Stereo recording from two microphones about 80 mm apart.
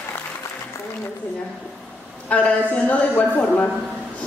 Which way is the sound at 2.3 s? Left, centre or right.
Centre.